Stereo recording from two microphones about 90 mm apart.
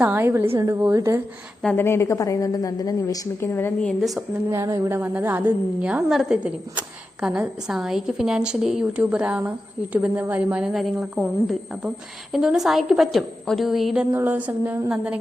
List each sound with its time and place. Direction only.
0.0 s a woman's voice: 25° right (ahead or behind)
1.7 s a woman's voice: 30° left (ahead or behind); by 3.2 s 45° left (ahead or behind)
3.4 s a woman's voice: 25° left (ahead or behind)
4.4 s speech: 35° right (ahead or behind)
4.9 s a woman's voice: 20° right (ahead or behind)
5.8 s a woman's voice: 10° right (ahead or behind)
9.0 s a woman's voice: 15° right (ahead or behind)
10.6 s a woman's voice: 5° right (ahead or behind)
14.1 s a woman's voice: 25° right (ahead or behind)